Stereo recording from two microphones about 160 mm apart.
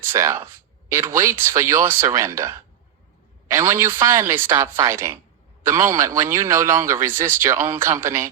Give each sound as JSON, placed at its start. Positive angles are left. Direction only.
{"t": 0.0, "sound": "a man's voice", "side_deg": -15}